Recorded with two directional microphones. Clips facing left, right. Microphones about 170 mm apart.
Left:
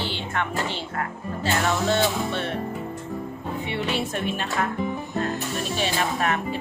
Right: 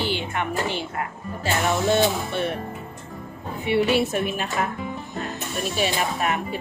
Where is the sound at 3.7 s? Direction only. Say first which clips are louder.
Right 9 dB; 10° right (ahead or behind).